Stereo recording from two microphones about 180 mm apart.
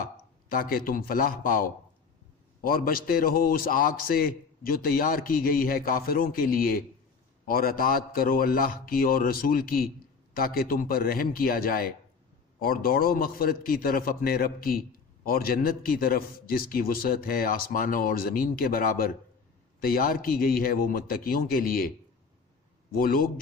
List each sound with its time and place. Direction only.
0.0 s a man's voice: 55° left (ahead or behind)
2.6 s a man's voice: 55° left (ahead or behind)